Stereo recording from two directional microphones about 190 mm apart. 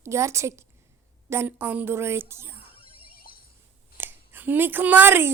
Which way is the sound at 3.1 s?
50° left (ahead or behind).